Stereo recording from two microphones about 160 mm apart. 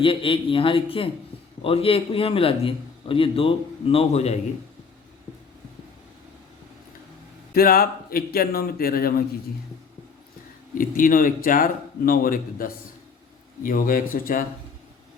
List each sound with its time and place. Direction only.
0.0 s a man's voice: 35° left (ahead or behind)
7.5 s a man's voice: 70° left (ahead or behind)
10.8 s speech: 60° left (ahead or behind)